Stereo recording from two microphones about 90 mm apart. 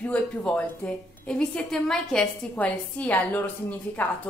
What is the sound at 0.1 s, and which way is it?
Speech, 10° left (ahead or behind).